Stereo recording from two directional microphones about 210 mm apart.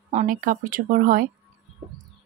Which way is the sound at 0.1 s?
35° right (ahead or behind).